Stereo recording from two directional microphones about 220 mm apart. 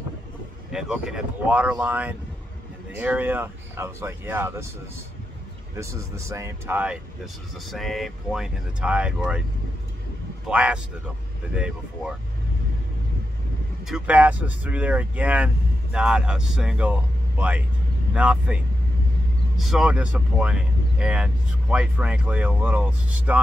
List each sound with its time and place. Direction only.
0.7 s speech: 5° right (ahead or behind)
10.5 s speech: 5° right (ahead or behind)
13.8 s speech: 5° right (ahead or behind)